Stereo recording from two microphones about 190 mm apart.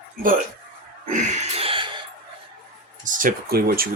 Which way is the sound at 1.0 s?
35° right (ahead or behind).